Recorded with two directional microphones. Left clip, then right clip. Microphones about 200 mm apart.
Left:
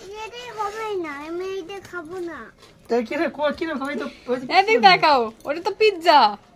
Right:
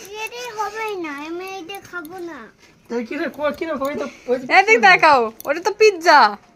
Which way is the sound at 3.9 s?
Centre (ahead or behind).